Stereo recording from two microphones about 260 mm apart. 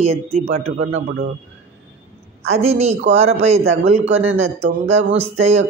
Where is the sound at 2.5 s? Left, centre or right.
Right.